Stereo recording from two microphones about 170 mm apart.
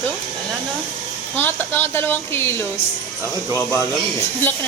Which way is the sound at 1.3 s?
10° left (ahead or behind).